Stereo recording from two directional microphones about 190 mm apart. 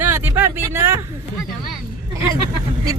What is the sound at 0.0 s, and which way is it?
Vehicle, 10° right (ahead or behind).